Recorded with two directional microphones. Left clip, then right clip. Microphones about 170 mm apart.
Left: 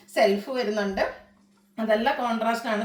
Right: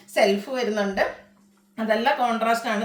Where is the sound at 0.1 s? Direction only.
15° right (ahead or behind).